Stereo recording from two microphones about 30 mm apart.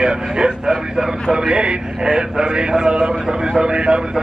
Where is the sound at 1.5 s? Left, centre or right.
Right.